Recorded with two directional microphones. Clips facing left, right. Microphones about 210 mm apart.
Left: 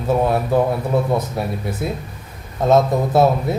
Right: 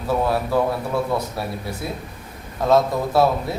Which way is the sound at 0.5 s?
20° left (ahead or behind).